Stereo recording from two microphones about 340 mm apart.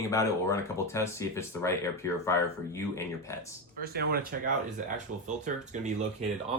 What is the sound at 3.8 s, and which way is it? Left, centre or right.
Speech, right.